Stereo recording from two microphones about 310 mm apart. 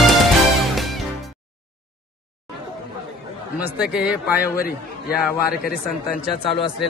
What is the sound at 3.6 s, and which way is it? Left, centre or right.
Speech, centre.